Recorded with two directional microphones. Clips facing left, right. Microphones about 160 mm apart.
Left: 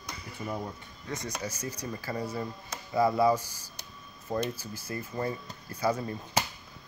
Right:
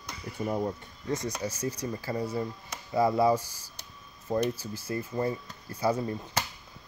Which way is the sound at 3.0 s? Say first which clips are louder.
Right 1 dB; 25° right (ahead or behind).